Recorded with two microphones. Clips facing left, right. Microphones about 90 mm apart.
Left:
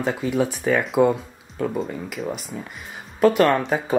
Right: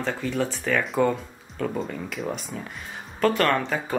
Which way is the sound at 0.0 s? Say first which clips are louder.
Left 4 dB; 10° left (ahead or behind).